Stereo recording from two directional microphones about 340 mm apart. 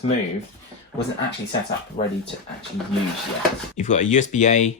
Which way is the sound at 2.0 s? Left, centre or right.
Left.